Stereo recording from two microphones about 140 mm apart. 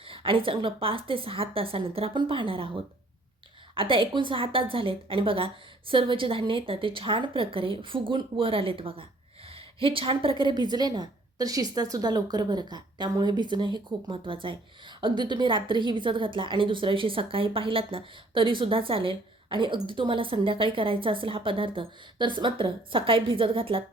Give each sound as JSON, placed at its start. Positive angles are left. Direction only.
{"t": 0.0, "sound": "a woman's voice", "side_deg": -40}